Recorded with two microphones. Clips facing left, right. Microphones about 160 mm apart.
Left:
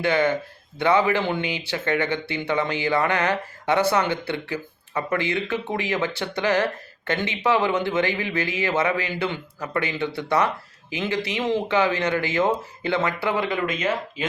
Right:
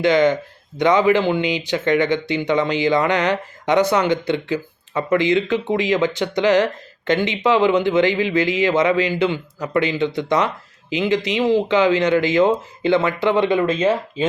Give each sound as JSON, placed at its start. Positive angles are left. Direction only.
{"t": 0.1, "sound": "a man's voice", "side_deg": -15}